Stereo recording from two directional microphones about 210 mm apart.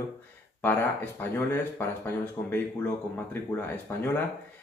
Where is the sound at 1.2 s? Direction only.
10° left (ahead or behind).